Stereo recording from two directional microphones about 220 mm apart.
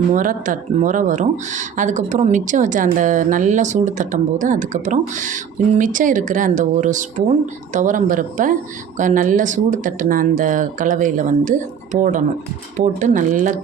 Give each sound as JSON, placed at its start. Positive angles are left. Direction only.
{"t": 0.1, "sound": "speech", "side_deg": -35}